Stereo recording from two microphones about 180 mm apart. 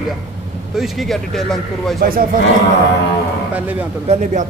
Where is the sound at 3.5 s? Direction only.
10° right (ahead or behind).